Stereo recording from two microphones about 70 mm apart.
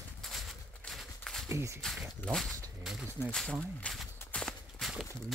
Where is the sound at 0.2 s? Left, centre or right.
Centre.